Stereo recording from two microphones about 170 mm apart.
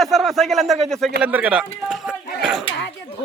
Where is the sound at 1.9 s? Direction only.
5° right (ahead or behind).